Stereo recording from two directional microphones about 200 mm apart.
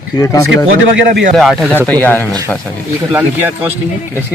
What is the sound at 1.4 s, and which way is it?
Speech, centre (ahead or behind).